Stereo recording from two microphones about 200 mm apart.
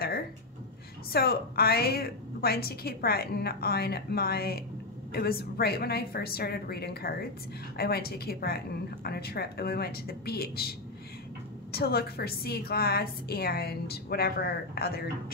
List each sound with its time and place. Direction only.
1.1 s a woman's voice: 50° left (ahead or behind)
11.7 s a woman's voice: 50° left (ahead or behind)